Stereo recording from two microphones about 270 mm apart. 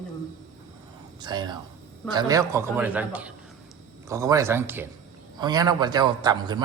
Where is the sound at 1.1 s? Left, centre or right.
Centre.